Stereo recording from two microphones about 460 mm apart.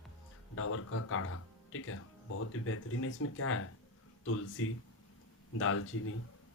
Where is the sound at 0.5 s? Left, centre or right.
Left.